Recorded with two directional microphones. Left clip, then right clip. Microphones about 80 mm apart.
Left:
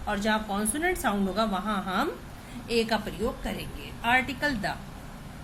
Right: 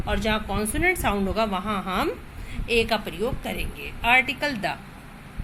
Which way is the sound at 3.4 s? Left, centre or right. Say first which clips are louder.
Right 5 dB; right.